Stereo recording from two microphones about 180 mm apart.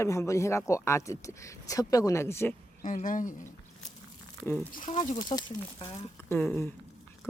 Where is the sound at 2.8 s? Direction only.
50° left (ahead or behind).